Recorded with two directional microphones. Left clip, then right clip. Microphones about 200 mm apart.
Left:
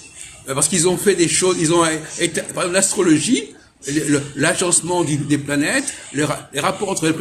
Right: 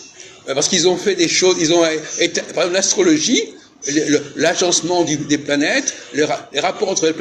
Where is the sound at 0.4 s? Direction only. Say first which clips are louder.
Right 4 dB; 40° left (ahead or behind).